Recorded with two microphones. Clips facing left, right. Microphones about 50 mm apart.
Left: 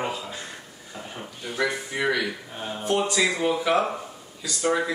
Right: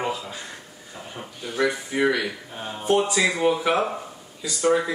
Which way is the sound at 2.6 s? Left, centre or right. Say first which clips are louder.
Right 3 dB; centre.